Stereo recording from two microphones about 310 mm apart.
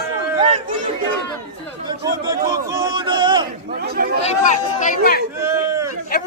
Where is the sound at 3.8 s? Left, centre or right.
Right.